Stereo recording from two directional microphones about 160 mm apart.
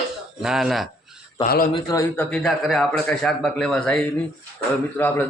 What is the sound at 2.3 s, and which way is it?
A man's voice, centre (ahead or behind).